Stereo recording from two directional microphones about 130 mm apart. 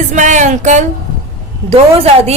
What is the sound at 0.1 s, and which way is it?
Speech, 70° right (ahead or behind).